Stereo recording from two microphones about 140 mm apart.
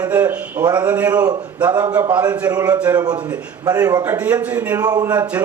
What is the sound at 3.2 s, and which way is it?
Speech, 10° right (ahead or behind).